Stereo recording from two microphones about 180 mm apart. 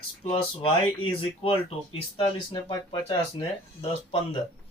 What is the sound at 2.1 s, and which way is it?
Speech, 25° left (ahead or behind).